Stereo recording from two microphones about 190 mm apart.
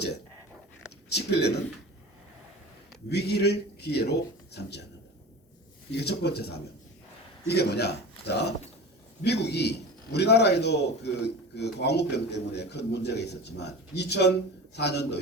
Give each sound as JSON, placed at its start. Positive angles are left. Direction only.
{"t": 1.1, "sound": "a man's voice", "side_deg": 60}
{"t": 3.1, "sound": "a man's voice", "side_deg": 60}
{"t": 5.9, "sound": "a man's voice", "side_deg": 60}